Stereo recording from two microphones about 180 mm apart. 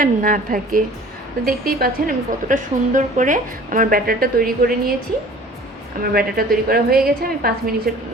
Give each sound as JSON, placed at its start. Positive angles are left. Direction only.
{"t": 0.0, "sound": "a woman's voice", "side_deg": -50}
{"t": 6.0, "sound": "a woman's voice", "side_deg": -55}